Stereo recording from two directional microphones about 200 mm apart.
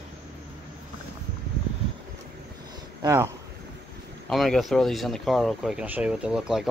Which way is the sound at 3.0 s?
15° right (ahead or behind).